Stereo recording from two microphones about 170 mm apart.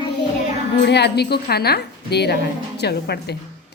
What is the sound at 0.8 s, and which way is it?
A woman's voice, 80° left.